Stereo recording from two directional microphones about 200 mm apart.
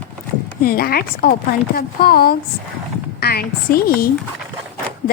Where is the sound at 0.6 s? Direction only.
45° left (ahead or behind).